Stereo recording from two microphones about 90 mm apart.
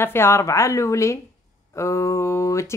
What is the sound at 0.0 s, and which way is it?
Speech, 25° left (ahead or behind).